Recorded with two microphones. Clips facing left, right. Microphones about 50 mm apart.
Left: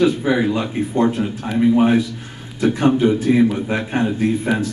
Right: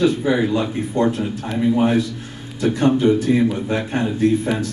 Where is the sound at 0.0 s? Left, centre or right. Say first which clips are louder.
Left 1 dB; centre.